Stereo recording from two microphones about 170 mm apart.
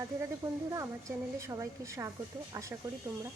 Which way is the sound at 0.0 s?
20° right (ahead or behind).